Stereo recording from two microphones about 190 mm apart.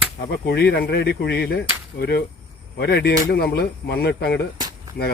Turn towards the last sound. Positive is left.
turn(degrees=-20)  # may be behind; listen again after turning